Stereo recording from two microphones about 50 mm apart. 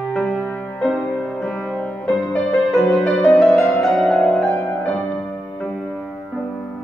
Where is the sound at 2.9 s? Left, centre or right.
Centre.